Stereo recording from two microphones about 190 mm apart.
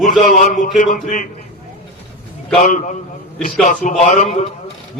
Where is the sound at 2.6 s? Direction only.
40° left (ahead or behind).